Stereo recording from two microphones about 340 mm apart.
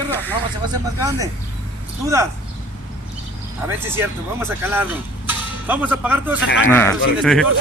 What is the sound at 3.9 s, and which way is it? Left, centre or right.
Speech, centre.